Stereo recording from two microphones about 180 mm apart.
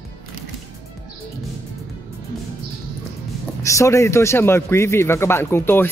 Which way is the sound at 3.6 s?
15° left (ahead or behind).